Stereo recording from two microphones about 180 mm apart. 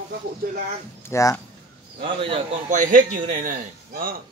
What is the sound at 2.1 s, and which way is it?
Speech, 30° right (ahead or behind).